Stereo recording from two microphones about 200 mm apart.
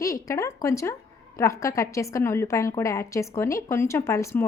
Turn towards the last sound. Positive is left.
turn(degrees=15)  # may be behind; listen again after turning